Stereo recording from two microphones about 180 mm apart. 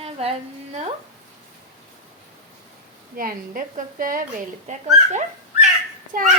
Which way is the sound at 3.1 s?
50° right (ahead or behind).